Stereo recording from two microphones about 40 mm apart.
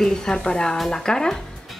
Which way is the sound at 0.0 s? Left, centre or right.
Left.